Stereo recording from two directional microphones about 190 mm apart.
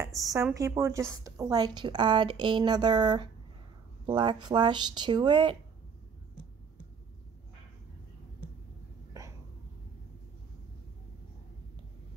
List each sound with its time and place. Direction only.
0.0 s a woman's voice: 15° right (ahead or behind)